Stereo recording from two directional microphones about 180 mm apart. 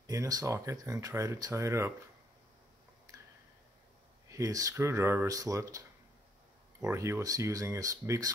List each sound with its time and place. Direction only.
0.0 s speech: 20° right (ahead or behind)
3.1 s a sound: 20° right (ahead or behind)
4.3 s speech: 20° right (ahead or behind)